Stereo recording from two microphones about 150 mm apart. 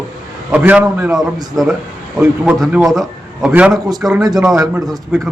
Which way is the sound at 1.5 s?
Centre (ahead or behind).